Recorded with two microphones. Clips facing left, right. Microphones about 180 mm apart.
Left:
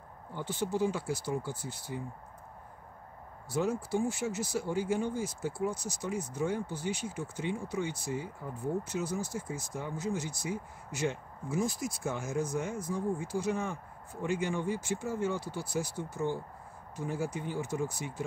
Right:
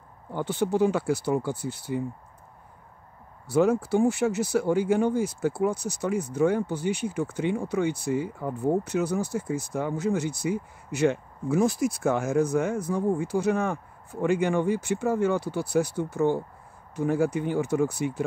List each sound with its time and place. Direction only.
0.3 s speech: 65° right (ahead or behind)
3.4 s speech: 65° right (ahead or behind)